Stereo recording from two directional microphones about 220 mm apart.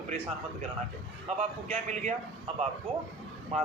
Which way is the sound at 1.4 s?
30° right (ahead or behind).